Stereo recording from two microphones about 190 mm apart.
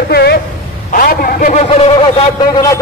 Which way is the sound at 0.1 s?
55° left (ahead or behind).